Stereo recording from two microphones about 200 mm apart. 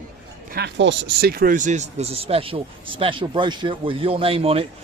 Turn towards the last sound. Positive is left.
turn(degrees=-30)  # may be behind; listen again after turning